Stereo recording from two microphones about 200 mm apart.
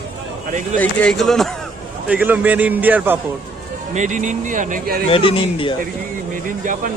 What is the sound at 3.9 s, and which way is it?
Speech, 40° right (ahead or behind).